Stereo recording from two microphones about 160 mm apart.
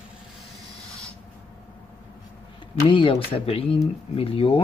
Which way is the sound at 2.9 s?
30° left (ahead or behind).